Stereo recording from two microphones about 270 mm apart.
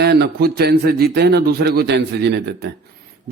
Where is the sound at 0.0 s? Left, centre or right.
Right.